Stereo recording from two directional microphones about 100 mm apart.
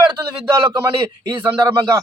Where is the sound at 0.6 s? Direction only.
45° right (ahead or behind).